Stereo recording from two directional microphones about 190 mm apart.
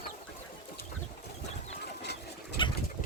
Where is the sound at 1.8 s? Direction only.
60° left (ahead or behind).